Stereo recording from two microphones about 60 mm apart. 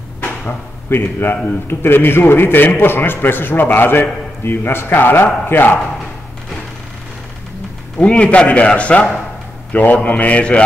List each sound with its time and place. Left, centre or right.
0.2 s a man's voice: left
8.0 s a man's voice: left